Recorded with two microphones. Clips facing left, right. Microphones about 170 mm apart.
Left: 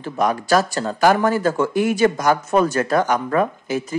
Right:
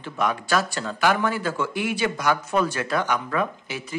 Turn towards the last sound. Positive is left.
turn(degrees=45)  # may be behind; listen again after turning